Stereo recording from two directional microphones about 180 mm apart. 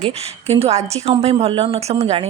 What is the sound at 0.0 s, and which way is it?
Speech, 35° right (ahead or behind).